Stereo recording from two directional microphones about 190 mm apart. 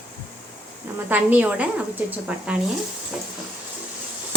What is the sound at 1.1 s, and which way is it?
Speech, 10° right (ahead or behind).